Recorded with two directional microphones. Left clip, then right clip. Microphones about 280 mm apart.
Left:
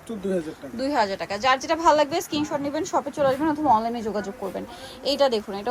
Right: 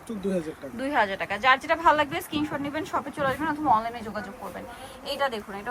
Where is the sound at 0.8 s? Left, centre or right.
Centre.